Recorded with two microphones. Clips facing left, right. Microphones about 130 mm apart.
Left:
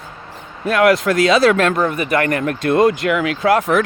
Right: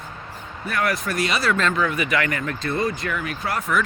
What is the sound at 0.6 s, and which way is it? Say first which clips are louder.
Speech: left 11 dB; 90° left.